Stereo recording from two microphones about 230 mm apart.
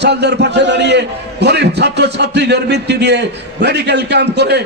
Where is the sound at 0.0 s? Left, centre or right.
Right.